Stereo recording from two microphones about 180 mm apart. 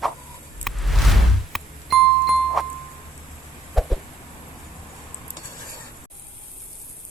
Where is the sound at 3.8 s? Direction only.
Centre (ahead or behind).